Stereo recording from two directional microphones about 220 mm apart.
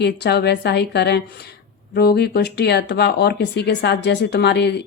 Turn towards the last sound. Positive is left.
turn(degrees=50)  # may be behind; listen again after turning